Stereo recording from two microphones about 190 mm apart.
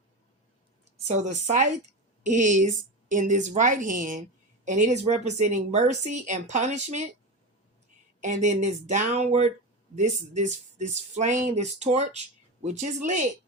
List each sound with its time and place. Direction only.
1.0 s speech: 40° right (ahead or behind)
8.2 s speech: 40° right (ahead or behind)